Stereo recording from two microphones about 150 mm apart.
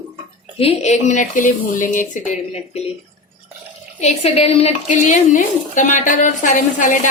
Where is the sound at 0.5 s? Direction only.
45° left (ahead or behind).